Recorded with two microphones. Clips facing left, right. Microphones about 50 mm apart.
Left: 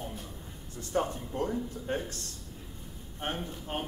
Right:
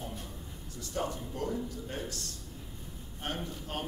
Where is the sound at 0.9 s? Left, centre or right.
Left.